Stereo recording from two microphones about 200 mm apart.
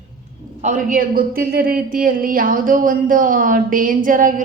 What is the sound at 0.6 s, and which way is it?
A man's voice, 40° right (ahead or behind).